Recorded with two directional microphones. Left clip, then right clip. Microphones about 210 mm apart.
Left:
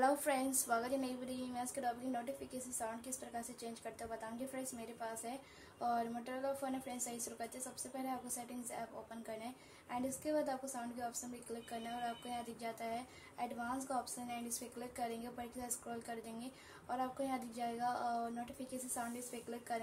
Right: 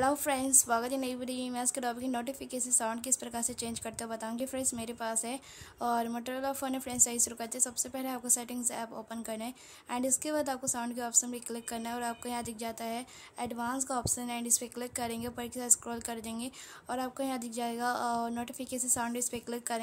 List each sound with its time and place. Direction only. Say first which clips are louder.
0.0 s speech: right 5 dB; 30° right (ahead or behind)
19.7 s speech: right 6 dB; 35° right (ahead or behind)